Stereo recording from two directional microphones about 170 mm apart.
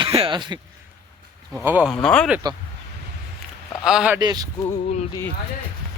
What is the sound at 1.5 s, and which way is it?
Speech, 10° right (ahead or behind).